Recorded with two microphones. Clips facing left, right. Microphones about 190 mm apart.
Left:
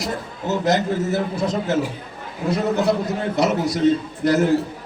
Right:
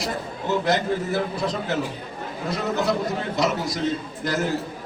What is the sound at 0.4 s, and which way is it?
A man's voice, 45° left (ahead or behind).